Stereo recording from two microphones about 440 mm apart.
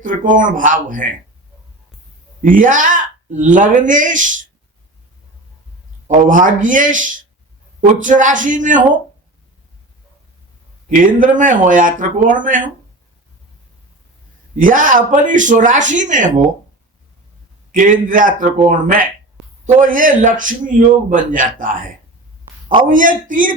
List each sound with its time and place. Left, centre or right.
0.0 s a man's voice: centre
2.4 s a man's voice: centre
6.2 s a man's voice: centre
10.8 s a man's voice: centre
14.5 s a man's voice: centre
17.7 s a man's voice: centre